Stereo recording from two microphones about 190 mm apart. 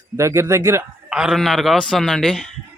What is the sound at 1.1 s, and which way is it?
Speech, 5° right (ahead or behind).